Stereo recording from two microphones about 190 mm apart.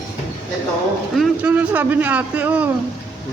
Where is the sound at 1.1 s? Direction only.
10° right (ahead or behind).